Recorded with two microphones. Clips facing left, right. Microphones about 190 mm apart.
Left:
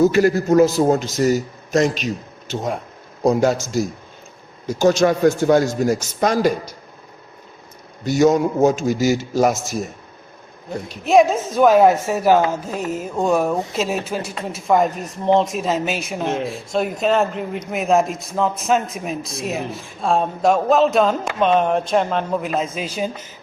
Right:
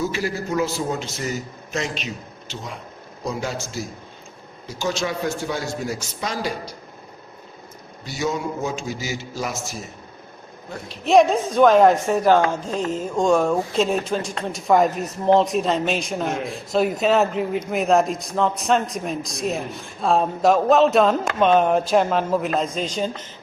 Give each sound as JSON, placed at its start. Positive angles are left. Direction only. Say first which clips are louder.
{"t": 0.0, "sound": "a man's voice", "louder": "left 10 dB", "side_deg": 50}
{"t": 8.0, "sound": "a man's voice", "louder": "left 10 dB", "side_deg": 45}
{"t": 11.0, "sound": "a woman's voice", "louder": "left 1 dB", "side_deg": 0}
{"t": 16.2, "sound": "speech", "louder": "left 3 dB", "side_deg": 30}
{"t": 16.5, "sound": "a man's voice", "louder": "right 1 dB", "side_deg": 0}